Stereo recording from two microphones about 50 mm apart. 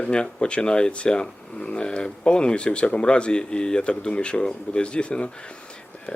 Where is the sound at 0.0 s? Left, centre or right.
Centre.